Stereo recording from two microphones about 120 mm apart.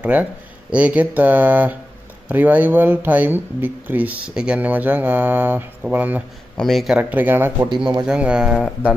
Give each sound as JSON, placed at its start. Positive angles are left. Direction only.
{"t": 0.0, "sound": "speech", "side_deg": -10}
{"t": 6.5, "sound": "a man's voice", "side_deg": 0}
{"t": 7.0, "sound": "speech", "side_deg": -15}
{"t": 8.5, "sound": "speech", "side_deg": 10}